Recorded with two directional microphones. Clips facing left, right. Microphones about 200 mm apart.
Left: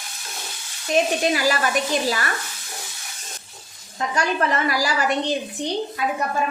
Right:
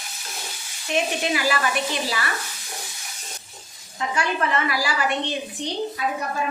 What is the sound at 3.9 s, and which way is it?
A woman's voice, 40° left (ahead or behind).